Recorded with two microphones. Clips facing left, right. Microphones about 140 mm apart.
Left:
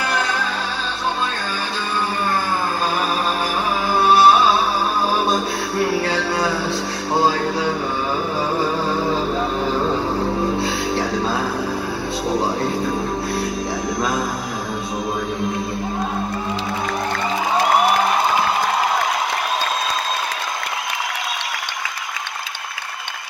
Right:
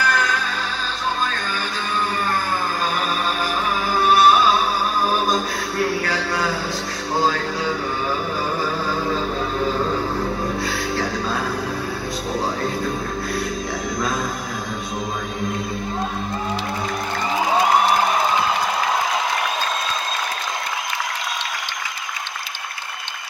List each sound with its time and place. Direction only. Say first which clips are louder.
0.0 s music: right 1 dB; 25° left (ahead or behind)
3.9 s music: left 2 dB; 30° left (ahead or behind)
5.9 s music: left 3 dB; 30° left (ahead or behind)
10.6 s music: left 3 dB; 25° left (ahead or behind)